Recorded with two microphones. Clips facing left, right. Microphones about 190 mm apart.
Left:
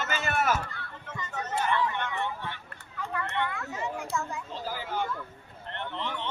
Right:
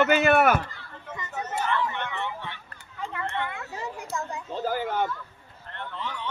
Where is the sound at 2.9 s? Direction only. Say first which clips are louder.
Right 1 dB; 25° right (ahead or behind).